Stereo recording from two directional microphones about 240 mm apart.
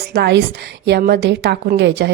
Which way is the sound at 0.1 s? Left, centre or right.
Right.